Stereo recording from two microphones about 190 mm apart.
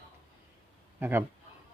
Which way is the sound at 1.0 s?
10° right (ahead or behind).